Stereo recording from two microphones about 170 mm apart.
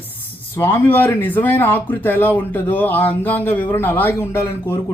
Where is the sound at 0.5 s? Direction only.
15° left (ahead or behind).